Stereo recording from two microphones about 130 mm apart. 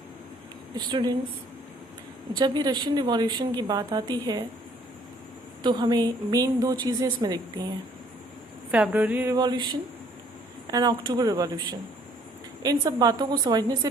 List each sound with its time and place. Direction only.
0.9 s a woman's voice: 35° right (ahead or behind)
2.3 s a woman's voice: 35° right (ahead or behind)
5.6 s a woman's voice: 35° right (ahead or behind)
8.7 s speech: 10° right (ahead or behind)
9.3 s a woman's voice: 30° right (ahead or behind)
12.6 s a woman's voice: 30° right (ahead or behind)